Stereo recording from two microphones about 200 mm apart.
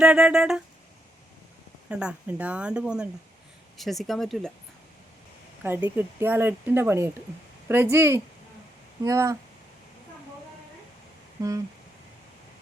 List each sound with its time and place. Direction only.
0.0 s speech: 5° right (ahead or behind)
1.9 s speech: 5° right (ahead or behind)
5.6 s speech: 10° right (ahead or behind)
11.4 s speech: 15° right (ahead or behind)